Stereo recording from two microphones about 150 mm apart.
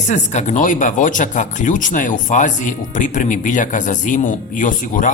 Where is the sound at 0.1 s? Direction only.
50° left (ahead or behind).